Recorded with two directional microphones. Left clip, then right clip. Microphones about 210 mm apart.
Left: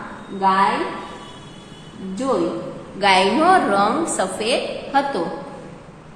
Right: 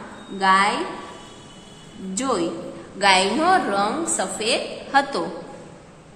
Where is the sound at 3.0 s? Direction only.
10° right (ahead or behind).